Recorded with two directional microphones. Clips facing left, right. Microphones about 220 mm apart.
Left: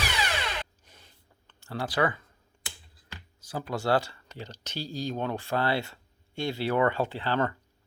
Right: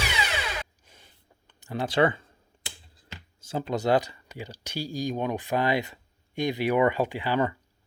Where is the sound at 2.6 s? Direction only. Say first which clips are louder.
Right 2 dB; 25° right (ahead or behind).